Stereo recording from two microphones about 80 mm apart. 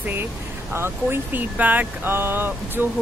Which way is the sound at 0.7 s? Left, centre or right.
Right.